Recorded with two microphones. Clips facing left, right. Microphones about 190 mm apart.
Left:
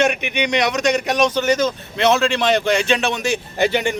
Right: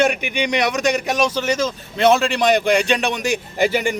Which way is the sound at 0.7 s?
5° right (ahead or behind).